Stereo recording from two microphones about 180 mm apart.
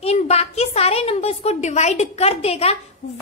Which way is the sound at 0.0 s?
35° left (ahead or behind).